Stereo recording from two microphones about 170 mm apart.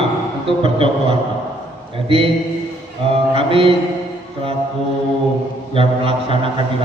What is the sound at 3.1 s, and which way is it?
Speech, 35° right (ahead or behind).